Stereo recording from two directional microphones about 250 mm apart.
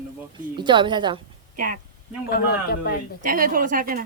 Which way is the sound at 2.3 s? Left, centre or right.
Left.